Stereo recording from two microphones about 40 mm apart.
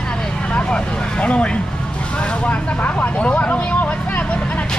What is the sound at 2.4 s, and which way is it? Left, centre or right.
Vehicle, left.